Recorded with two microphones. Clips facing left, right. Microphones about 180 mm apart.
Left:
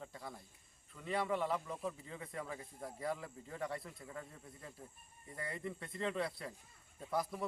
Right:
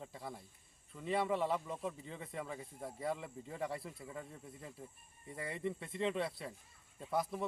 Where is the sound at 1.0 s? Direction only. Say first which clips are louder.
Right 2 dB; centre (ahead or behind).